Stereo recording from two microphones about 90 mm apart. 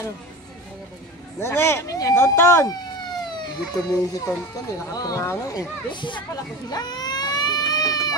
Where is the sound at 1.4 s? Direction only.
30° left (ahead or behind).